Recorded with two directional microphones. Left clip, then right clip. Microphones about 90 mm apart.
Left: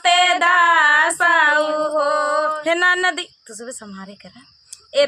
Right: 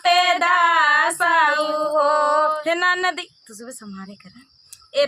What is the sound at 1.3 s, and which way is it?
Female singing, 25° left (ahead or behind).